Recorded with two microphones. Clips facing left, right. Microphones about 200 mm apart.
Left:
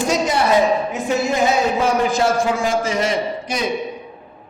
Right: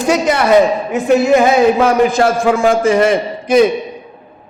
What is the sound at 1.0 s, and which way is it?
A man's voice, 60° right (ahead or behind).